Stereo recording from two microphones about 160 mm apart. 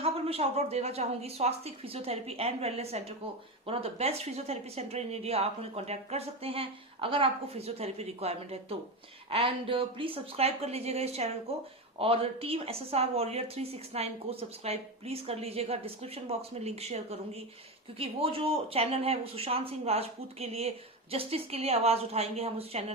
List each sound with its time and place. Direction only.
0.0 s speech: 40° right (ahead or behind)